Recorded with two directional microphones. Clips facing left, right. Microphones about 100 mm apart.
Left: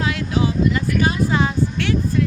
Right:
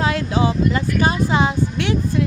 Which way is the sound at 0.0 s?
35° right (ahead or behind).